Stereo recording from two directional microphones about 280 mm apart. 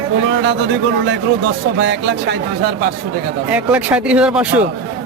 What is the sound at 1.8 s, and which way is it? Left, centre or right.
Speech, right.